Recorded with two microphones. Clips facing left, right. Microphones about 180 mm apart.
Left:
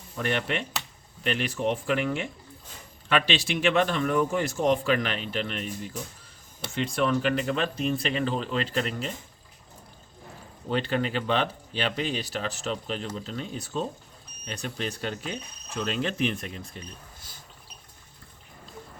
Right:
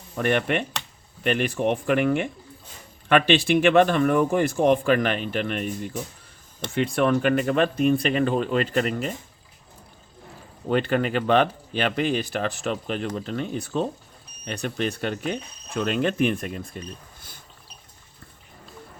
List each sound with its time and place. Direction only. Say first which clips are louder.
0.2 s a man's voice: right 6 dB; 55° right (ahead or behind)
10.7 s speech: right 5 dB; 55° right (ahead or behind)